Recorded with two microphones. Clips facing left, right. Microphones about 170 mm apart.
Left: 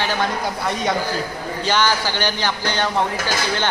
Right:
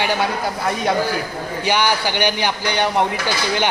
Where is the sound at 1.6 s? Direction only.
15° right (ahead or behind).